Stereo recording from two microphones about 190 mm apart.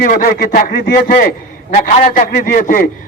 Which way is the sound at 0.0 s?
50° left (ahead or behind).